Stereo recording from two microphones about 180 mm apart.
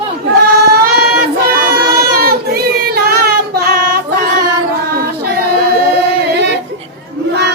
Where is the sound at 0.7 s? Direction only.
55° right (ahead or behind).